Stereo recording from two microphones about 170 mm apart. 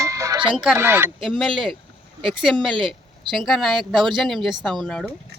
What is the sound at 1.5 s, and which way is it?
Speech, 30° right (ahead or behind).